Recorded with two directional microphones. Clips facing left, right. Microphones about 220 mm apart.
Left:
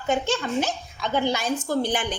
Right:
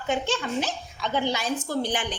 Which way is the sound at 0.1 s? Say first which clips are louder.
Left 3 dB; 45° left (ahead or behind).